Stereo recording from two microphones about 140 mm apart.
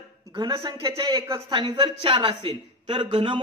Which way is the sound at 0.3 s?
35° right (ahead or behind).